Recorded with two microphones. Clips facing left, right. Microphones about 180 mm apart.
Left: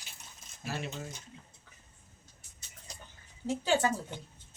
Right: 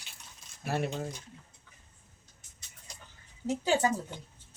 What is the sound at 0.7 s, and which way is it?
Speech, 55° right (ahead or behind).